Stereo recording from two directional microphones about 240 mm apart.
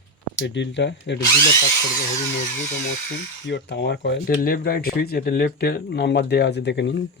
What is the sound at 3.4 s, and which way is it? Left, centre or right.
Speech, left.